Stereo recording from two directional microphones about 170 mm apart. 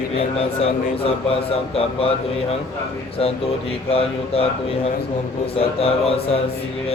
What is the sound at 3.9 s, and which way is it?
Speech, 35° left (ahead or behind).